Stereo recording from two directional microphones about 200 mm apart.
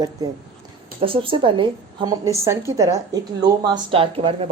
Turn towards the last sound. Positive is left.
turn(degrees=-25)  # may be behind; listen again after turning